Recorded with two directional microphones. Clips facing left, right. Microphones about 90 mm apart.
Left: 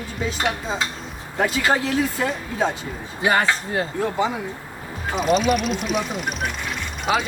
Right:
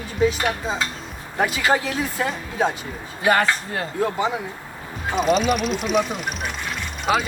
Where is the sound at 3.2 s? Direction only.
20° left (ahead or behind).